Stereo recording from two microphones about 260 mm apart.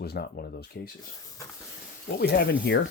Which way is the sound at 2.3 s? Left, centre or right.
Left.